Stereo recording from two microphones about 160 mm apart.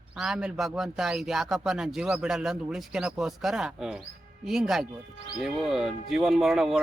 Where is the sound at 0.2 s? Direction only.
5° right (ahead or behind).